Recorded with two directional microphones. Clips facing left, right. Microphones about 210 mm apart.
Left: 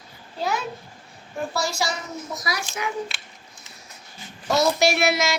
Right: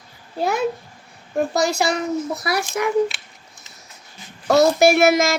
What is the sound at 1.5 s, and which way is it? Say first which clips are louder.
A child's voice: right 6 dB; 60° right (ahead or behind).